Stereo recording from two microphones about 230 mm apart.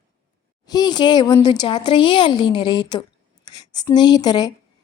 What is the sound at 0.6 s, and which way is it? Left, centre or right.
A woman's voice, centre.